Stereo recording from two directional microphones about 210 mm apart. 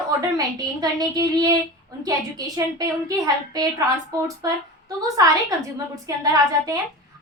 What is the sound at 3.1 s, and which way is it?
A woman's voice, 15° right (ahead or behind).